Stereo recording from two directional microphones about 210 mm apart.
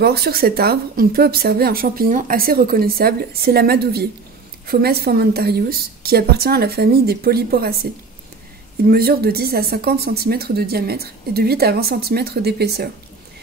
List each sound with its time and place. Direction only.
0.0 s speech: 50° right (ahead or behind)